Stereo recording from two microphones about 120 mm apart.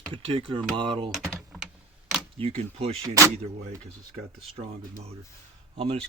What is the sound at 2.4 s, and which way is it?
Speech, 55° right (ahead or behind).